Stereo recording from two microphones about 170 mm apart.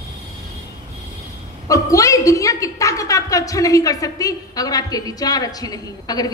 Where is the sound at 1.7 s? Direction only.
20° left (ahead or behind).